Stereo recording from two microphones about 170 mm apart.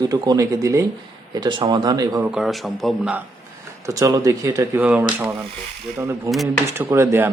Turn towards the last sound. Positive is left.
turn(degrees=-15)  # may be behind; listen again after turning